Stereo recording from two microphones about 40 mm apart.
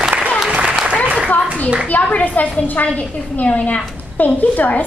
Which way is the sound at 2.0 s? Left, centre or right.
Left.